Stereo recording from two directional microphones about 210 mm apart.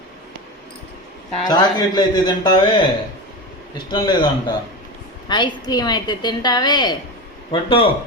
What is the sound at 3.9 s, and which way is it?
Speech, 25° left (ahead or behind).